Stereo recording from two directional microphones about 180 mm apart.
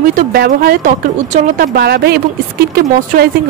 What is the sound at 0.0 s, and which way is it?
A woman's voice, 55° right (ahead or behind).